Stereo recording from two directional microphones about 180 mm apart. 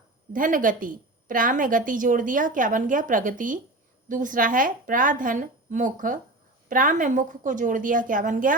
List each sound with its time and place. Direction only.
0.3 s a woman's voice: 50° right (ahead or behind)